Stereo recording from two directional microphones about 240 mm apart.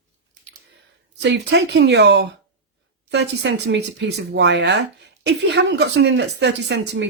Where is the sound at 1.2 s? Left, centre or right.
Right.